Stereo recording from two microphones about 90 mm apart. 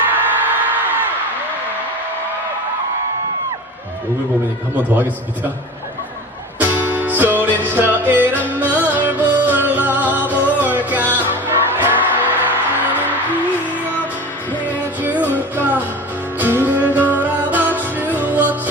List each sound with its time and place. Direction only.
0.1 s music: 20° right (ahead or behind)
6.6 s music: 20° right (ahead or behind)
15.0 s music: 20° right (ahead or behind)